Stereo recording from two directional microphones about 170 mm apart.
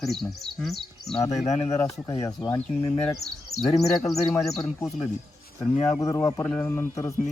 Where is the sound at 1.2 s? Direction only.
40° left (ahead or behind).